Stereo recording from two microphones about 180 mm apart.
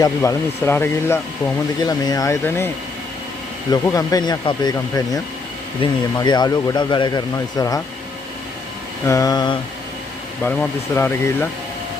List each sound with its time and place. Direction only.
0.0 s speech: 15° left (ahead or behind)
3.7 s speech: 20° left (ahead or behind)
9.0 s speech: 20° left (ahead or behind)
10.4 s speech: 10° left (ahead or behind)